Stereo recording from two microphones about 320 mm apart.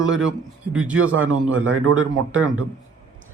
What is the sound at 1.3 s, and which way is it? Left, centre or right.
A man's voice, right.